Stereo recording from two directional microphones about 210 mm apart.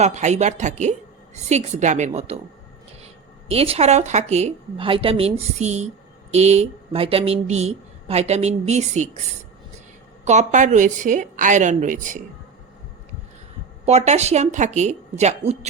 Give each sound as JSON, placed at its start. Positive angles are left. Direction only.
{"t": 0.0, "sound": "speech", "side_deg": -35}
{"t": 3.5, "sound": "speech", "side_deg": -30}
{"t": 10.2, "sound": "speech", "side_deg": -35}
{"t": 13.8, "sound": "speech", "side_deg": -30}